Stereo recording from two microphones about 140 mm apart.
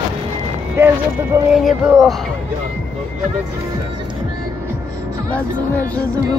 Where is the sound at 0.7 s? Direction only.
20° right (ahead or behind).